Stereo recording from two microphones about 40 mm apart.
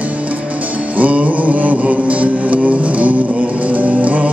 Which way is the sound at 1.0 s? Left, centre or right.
Right.